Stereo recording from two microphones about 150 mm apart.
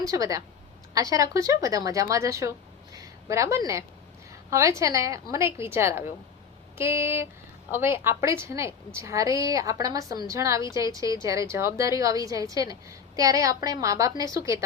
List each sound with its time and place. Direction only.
0.0 s a woman's voice: 25° right (ahead or behind)
2.9 s a sound: 20° right (ahead or behind)
4.3 s a woman's voice: 20° right (ahead or behind)